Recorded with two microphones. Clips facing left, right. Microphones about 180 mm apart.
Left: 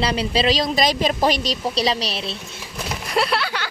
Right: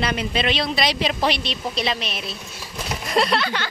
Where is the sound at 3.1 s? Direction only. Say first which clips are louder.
Right 1 dB; 5° left (ahead or behind).